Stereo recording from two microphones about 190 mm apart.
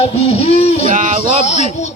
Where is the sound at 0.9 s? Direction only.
40° right (ahead or behind).